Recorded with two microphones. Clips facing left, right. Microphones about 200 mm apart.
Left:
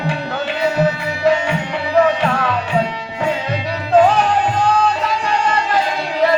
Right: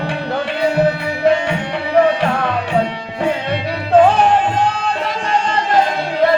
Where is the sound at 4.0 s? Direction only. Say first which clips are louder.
Right 2 dB; 60° right (ahead or behind).